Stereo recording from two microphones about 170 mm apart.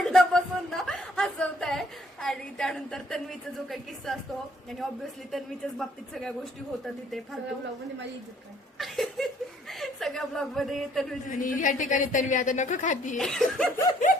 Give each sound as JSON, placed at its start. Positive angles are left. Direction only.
{"t": 0.0, "sound": "a sound", "side_deg": 5}
{"t": 5.3, "sound": "speech", "side_deg": 0}
{"t": 8.8, "sound": "chuckle", "side_deg": 0}
{"t": 11.3, "sound": "a woman's voice", "side_deg": 50}
{"t": 13.1, "sound": "speech", "side_deg": 0}